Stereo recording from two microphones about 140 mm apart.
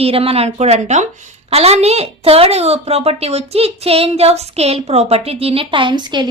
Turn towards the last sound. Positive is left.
turn(degrees=-35)  # may be behind; listen again after turning